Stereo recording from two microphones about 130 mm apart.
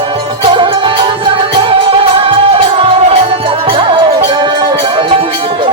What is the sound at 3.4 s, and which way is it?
Music, 45° right (ahead or behind).